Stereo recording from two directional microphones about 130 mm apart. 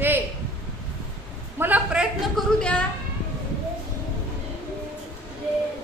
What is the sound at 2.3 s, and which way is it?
Speech, 10° left (ahead or behind).